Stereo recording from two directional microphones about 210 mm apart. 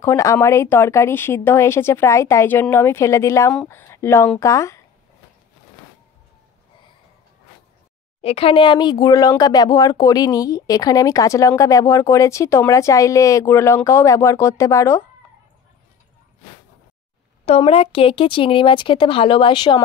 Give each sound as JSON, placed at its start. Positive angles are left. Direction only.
{"t": 0.0, "sound": "speech", "side_deg": 15}
{"t": 8.2, "sound": "speech", "side_deg": 30}
{"t": 17.5, "sound": "speech", "side_deg": 25}